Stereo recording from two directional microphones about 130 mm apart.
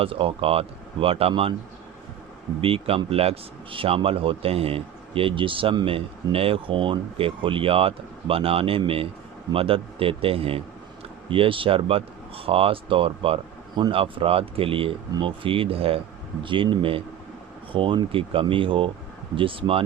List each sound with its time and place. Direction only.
0.0 s speech: 45° right (ahead or behind)
2.6 s speech: 45° right (ahead or behind)